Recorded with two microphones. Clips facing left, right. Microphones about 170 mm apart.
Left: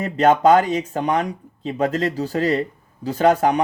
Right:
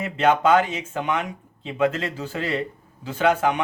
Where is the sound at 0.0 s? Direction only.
40° left (ahead or behind).